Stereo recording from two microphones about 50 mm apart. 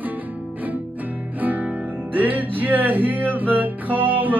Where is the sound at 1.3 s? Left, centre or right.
Right.